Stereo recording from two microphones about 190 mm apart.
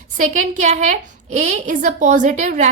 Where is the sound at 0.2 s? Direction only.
40° right (ahead or behind).